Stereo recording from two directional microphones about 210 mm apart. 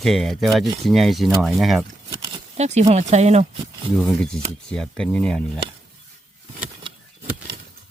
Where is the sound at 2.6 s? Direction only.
30° right (ahead or behind).